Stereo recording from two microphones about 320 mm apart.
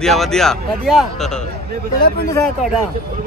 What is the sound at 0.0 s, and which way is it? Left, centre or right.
Speech, centre.